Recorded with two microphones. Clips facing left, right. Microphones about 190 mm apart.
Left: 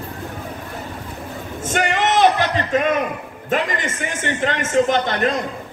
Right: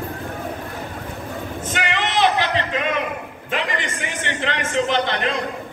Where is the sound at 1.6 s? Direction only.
50° left (ahead or behind).